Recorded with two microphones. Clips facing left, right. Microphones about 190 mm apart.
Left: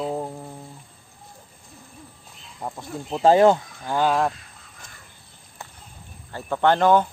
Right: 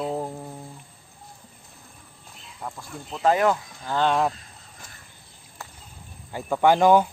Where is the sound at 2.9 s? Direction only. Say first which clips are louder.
Left 5 dB; 30° left (ahead or behind).